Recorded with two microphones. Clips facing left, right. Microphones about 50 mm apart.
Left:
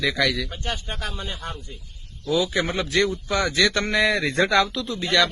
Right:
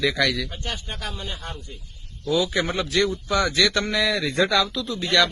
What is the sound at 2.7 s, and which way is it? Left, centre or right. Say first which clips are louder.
A man's voice: even; left.